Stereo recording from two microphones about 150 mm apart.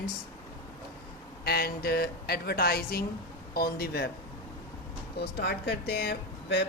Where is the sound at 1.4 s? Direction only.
90° left.